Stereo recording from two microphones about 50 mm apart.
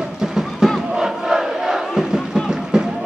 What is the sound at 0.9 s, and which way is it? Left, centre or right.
Crowd, centre.